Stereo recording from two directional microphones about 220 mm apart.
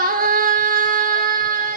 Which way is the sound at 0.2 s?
40° right (ahead or behind).